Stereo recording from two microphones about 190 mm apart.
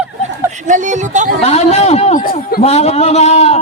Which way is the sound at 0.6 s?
40° right (ahead or behind).